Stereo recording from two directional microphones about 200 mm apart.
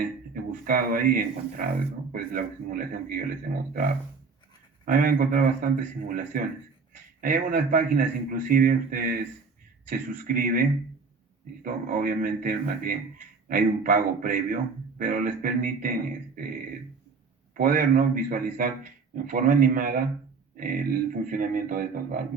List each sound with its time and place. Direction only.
0.6 s a man's voice: 45° right (ahead or behind)
4.9 s a man's voice: 45° right (ahead or behind)
17.5 s a man's voice: 45° right (ahead or behind)